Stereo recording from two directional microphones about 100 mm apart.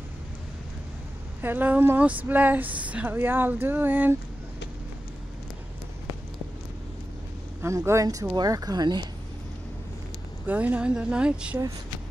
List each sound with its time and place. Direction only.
1.4 s speech: 20° right (ahead or behind)
7.6 s speech: 30° right (ahead or behind); by 9.1 s 45° right (ahead or behind)
10.4 s speech: 15° right (ahead or behind)